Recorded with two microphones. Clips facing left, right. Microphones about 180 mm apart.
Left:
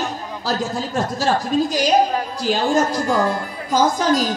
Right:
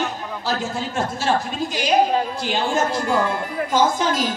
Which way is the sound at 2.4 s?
40° left (ahead or behind).